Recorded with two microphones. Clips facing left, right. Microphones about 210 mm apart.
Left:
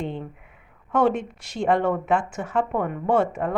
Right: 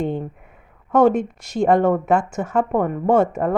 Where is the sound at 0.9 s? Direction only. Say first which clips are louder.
Right 6 dB; 45° right (ahead or behind).